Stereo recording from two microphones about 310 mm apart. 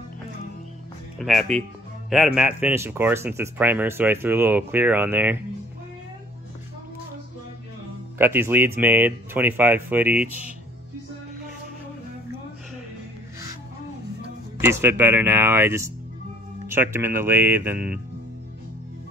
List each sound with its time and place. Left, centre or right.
1.2 s speech: centre
8.2 s speech: centre
14.6 s speech: centre